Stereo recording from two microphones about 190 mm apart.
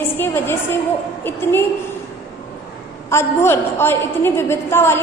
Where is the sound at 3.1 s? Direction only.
15° left (ahead or behind).